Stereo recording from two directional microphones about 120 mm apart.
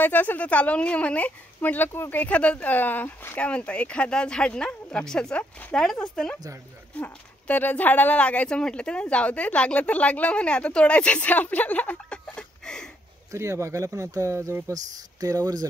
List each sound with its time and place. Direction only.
0.0 s speech: 15° left (ahead or behind)
13.3 s speech: 25° right (ahead or behind)